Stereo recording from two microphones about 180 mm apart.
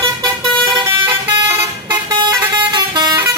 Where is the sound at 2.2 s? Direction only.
25° right (ahead or behind).